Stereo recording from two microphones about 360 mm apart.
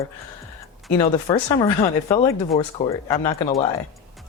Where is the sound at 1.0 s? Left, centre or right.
Centre.